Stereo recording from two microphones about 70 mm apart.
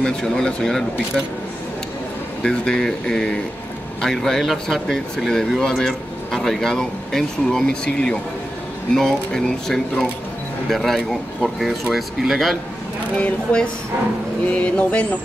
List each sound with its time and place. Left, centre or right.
0.0 s speech: centre
2.4 s speech: centre
13.2 s speech: centre